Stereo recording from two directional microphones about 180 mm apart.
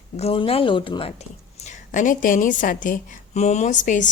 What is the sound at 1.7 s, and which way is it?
A woman's voice, 45° left (ahead or behind).